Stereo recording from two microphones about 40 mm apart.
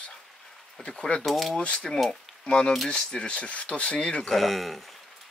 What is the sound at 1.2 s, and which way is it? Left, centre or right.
Speech, centre.